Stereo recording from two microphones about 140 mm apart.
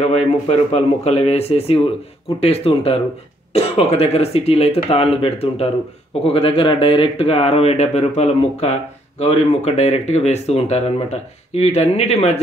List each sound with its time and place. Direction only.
0.0 s speech: 50° left (ahead or behind)